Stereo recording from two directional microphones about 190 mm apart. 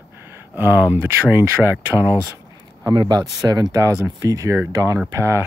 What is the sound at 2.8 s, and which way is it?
Speech, 20° right (ahead or behind).